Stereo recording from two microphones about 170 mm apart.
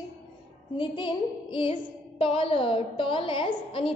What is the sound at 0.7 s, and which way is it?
A woman's voice, 30° left (ahead or behind).